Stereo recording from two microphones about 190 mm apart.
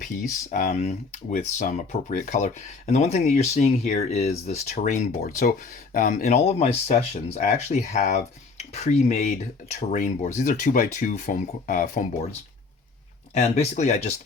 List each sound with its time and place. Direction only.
0.0 s speech: 45° left (ahead or behind)
13.3 s speech: 35° left (ahead or behind)